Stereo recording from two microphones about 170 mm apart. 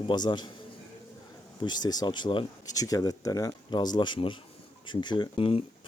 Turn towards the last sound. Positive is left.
turn(degrees=35)  # may be behind; listen again after turning